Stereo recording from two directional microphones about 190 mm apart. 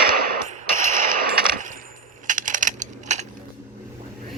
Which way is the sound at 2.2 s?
40° right (ahead or behind).